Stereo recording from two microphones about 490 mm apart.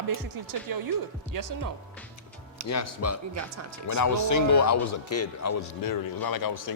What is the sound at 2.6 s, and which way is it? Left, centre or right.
Speech, left.